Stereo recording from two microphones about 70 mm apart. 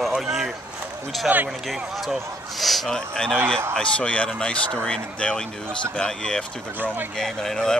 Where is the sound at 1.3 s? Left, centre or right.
Right.